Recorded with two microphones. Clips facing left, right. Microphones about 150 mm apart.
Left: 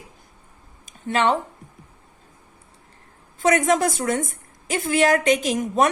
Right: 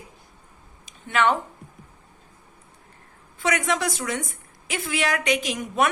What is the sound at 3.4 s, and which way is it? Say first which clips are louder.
A woman's voice: left 6 dB; 45° left (ahead or behind).